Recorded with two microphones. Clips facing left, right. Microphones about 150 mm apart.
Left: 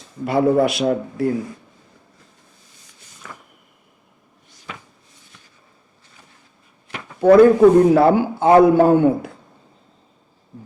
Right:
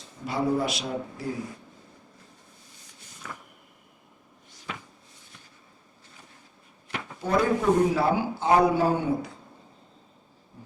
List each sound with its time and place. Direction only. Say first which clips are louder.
0.3 s a man's voice: left 10 dB; 60° left (ahead or behind)
7.2 s a man's voice: left 15 dB; 60° left (ahead or behind)